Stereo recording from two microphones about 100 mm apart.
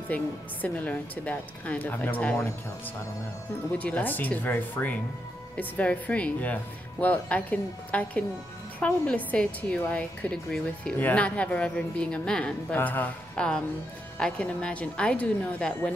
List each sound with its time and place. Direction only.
0.1 s a woman's voice: 15° left (ahead or behind)
3.7 s a woman's voice: 15° left (ahead or behind)